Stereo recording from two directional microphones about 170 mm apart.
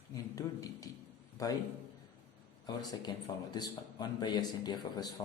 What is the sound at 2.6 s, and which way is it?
A man's voice, 25° left (ahead or behind).